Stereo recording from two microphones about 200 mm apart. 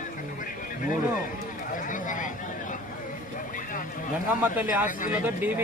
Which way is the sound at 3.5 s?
40° left (ahead or behind).